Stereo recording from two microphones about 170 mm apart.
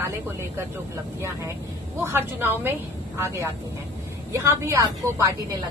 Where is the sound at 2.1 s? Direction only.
15° right (ahead or behind).